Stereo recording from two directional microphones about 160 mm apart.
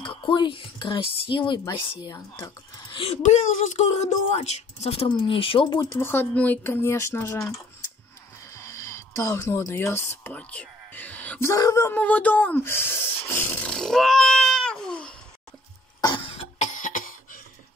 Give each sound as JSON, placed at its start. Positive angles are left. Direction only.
{"t": 0.0, "sound": "speech", "side_deg": 30}
{"t": 3.2, "sound": "speech", "side_deg": 50}
{"t": 11.9, "sound": "speech", "side_deg": 10}
{"t": 16.3, "sound": "cough", "side_deg": 50}